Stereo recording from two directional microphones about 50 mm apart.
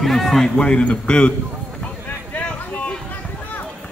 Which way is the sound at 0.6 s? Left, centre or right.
Left.